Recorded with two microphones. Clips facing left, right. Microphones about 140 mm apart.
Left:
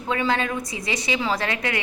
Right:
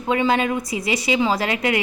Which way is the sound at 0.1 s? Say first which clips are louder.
Right 4 dB; 20° right (ahead or behind).